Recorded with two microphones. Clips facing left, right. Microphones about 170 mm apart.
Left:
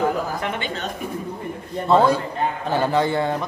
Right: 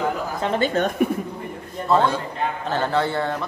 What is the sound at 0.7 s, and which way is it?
Speech, 55° right (ahead or behind).